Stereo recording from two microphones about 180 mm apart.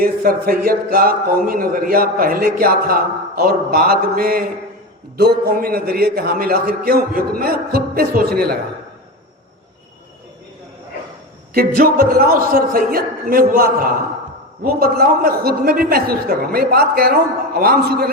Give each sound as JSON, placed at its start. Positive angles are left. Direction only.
{"t": 0.0, "sound": "speech", "side_deg": -55}
{"t": 11.5, "sound": "a man's voice", "side_deg": -55}